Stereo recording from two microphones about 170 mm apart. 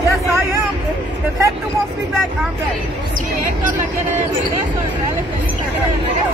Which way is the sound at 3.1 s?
55° right (ahead or behind).